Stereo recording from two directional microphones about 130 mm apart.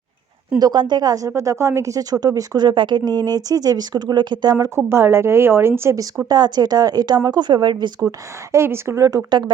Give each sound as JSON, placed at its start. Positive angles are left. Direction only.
{"t": 0.6, "sound": "speech", "side_deg": -35}
{"t": 4.9, "sound": "speech", "side_deg": -20}
{"t": 8.5, "sound": "speech", "side_deg": -20}